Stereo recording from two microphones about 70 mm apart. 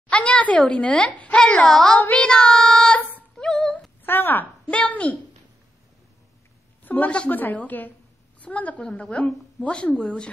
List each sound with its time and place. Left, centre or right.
0.1 s a sound: centre
0.6 s a woman's voice: centre
2.0 s a woman's voice: left
3.3 s a sound: centre
4.0 s speech: left
4.6 s a woman's voice: centre
6.8 s a woman's voice: left